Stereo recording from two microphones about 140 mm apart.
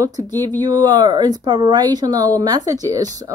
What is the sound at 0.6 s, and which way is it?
Speech, 30° right (ahead or behind).